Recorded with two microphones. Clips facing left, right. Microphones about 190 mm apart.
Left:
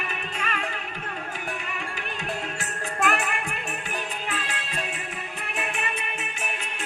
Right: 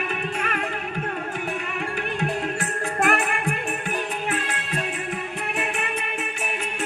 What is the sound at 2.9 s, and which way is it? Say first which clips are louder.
Music: right 3 dB; 55° right (ahead or behind).